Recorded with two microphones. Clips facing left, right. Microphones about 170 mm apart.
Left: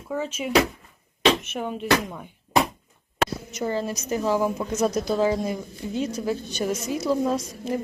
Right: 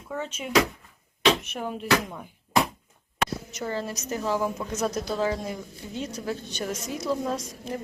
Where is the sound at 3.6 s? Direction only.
15° left (ahead or behind).